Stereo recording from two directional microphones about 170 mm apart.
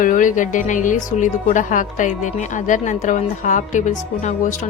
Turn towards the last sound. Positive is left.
turn(degrees=45)  # may be behind; listen again after turning